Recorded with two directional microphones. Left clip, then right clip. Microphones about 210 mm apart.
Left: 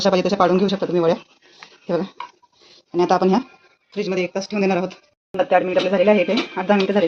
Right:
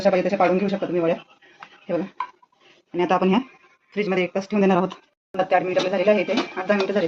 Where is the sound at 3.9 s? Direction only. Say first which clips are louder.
Even; 15° right (ahead or behind).